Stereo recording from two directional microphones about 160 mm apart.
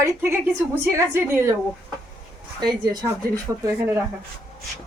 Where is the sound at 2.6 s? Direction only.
25° right (ahead or behind).